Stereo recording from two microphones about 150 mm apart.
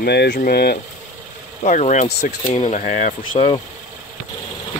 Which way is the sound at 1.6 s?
55° left (ahead or behind).